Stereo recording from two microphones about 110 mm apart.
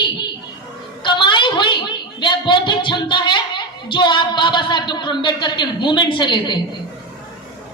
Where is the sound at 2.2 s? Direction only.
45° left (ahead or behind).